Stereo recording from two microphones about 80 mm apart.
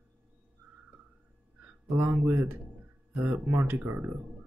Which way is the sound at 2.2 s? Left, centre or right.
Right.